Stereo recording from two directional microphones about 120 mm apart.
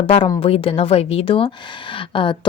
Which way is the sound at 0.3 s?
50° left (ahead or behind).